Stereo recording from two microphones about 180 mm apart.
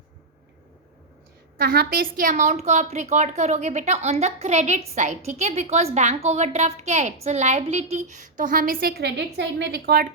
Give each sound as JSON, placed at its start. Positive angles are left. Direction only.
{"t": 1.5, "sound": "a woman's voice", "side_deg": -60}